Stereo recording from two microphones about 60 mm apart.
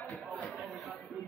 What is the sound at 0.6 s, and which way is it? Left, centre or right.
Chatter, centre.